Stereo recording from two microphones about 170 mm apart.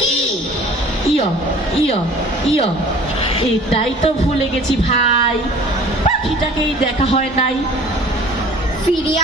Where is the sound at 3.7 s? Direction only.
35° left (ahead or behind).